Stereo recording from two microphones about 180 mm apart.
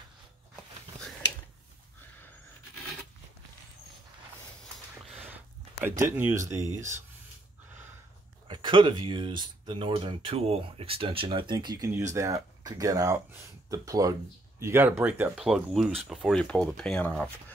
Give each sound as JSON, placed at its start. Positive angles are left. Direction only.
{"t": 5.0, "sound": "a sound", "side_deg": -10}
{"t": 5.9, "sound": "speech", "side_deg": -15}
{"t": 8.5, "sound": "speech", "side_deg": -25}